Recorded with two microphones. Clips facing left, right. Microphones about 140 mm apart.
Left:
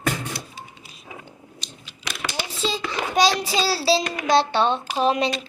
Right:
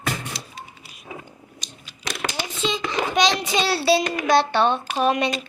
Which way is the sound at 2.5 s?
35° left (ahead or behind).